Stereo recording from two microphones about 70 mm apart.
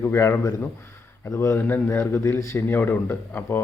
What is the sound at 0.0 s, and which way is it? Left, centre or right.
Speech, left.